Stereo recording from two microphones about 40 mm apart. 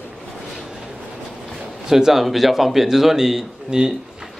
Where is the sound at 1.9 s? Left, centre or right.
Centre.